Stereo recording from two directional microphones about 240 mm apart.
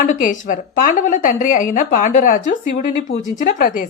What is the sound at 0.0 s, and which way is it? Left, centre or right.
Speech, left.